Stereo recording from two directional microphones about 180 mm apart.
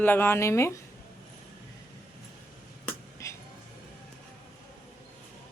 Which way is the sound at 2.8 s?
15° left (ahead or behind).